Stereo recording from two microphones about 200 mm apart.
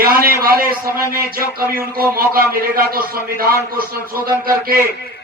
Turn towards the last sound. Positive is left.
turn(degrees=-45)  # may be behind; listen again after turning